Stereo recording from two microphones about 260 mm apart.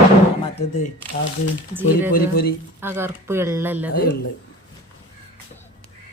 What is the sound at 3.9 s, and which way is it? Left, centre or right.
Speech, left.